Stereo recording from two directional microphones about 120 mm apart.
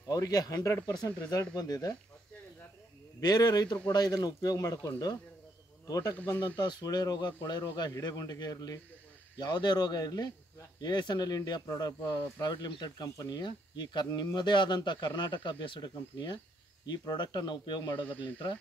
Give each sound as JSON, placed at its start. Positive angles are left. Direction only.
{"t": 0.1, "sound": "speech", "side_deg": 30}
{"t": 3.2, "sound": "speech", "side_deg": 35}